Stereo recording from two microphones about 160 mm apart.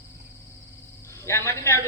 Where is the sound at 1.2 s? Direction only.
15° left (ahead or behind).